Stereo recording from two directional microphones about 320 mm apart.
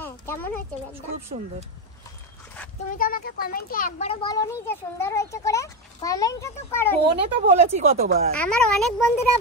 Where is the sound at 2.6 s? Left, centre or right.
Centre.